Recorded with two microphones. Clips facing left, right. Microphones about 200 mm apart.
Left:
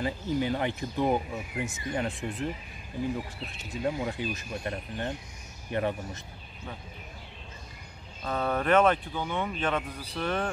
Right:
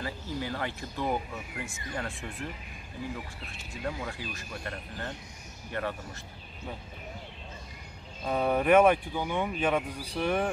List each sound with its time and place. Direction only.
0.0 s speech: 20° left (ahead or behind)
3.8 s speech: 20° left (ahead or behind)
8.3 s speech: 10° right (ahead or behind)